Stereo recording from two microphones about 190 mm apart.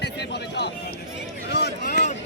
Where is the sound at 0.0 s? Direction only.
60° left (ahead or behind).